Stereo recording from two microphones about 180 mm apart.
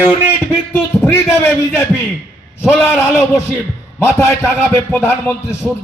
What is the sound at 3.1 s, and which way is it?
Speech, 15° left (ahead or behind).